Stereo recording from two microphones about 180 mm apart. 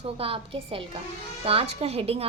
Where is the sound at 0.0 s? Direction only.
30° right (ahead or behind).